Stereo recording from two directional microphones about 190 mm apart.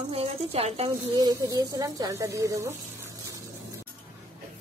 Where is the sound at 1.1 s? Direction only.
20° right (ahead or behind).